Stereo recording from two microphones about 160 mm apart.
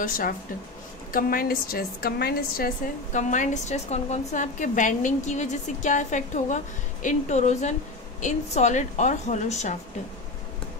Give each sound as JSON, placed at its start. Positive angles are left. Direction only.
{"t": 1.1, "sound": "a woman's voice", "side_deg": 65}